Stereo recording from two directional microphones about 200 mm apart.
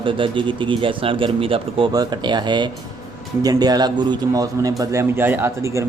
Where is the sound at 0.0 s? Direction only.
25° right (ahead or behind).